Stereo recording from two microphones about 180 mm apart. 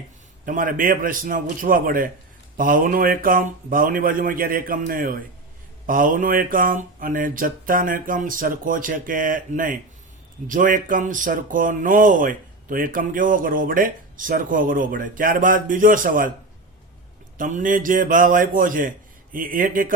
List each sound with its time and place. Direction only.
0.4 s speech: 50° right (ahead or behind)
17.3 s speech: 50° right (ahead or behind)